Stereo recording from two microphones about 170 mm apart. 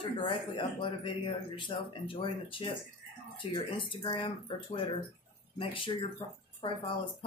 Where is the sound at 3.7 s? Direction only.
30° left (ahead or behind).